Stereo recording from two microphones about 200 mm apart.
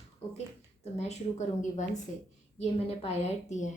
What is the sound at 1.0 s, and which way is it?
A woman's voice, 35° left (ahead or behind).